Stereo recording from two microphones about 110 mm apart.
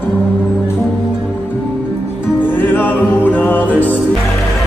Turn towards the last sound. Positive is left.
turn(degrees=15)  # may be behind; listen again after turning